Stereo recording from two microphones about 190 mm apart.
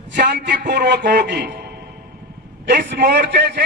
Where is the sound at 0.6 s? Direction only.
60° right (ahead or behind).